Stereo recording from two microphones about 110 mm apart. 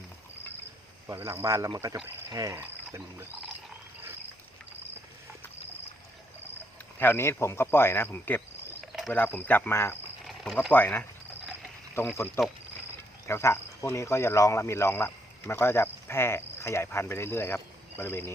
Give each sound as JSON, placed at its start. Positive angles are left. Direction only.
{"t": 1.0, "sound": "speech", "side_deg": -20}
{"t": 2.6, "sound": "speech", "side_deg": -20}
{"t": 7.0, "sound": "speech", "side_deg": 20}
{"t": 8.9, "sound": "cricket", "side_deg": 0}
{"t": 9.1, "sound": "speech", "side_deg": 20}
{"t": 10.2, "sound": "a sound", "side_deg": 0}
{"t": 10.7, "sound": "speech", "side_deg": 15}